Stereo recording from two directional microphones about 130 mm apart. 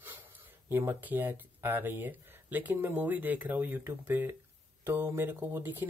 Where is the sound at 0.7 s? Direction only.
15° right (ahead or behind).